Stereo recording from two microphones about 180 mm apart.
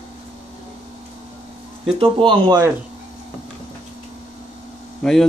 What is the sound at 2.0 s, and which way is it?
Speech, 30° right (ahead or behind).